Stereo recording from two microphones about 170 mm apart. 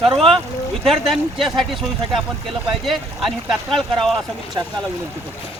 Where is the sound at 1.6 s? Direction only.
Centre (ahead or behind).